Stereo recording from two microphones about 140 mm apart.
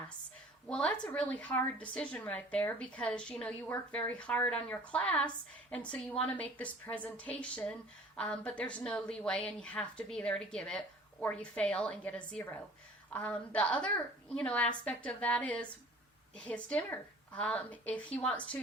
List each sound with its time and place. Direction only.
0.7 s a woman's voice: 5° left (ahead or behind)